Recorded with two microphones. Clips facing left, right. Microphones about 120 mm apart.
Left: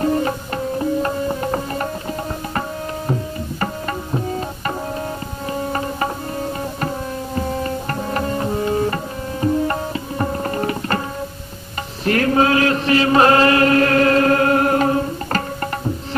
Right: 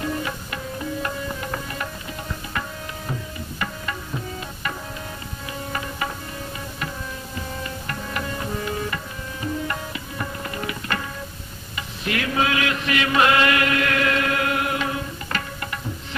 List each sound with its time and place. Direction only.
0.0 s music: 40° left (ahead or behind)
3.1 s tabla: 40° left (ahead or behind)
5.5 s music: 40° left (ahead or behind)
7.3 s tabla: 40° left (ahead or behind)
12.0 s chant: 40° left (ahead or behind)